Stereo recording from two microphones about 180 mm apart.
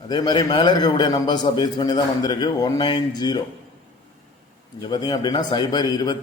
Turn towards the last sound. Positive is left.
turn(degrees=25)  # may be behind; listen again after turning